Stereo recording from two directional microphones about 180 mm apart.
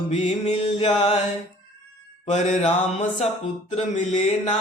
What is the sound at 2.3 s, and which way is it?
Mantra, 40° left (ahead or behind).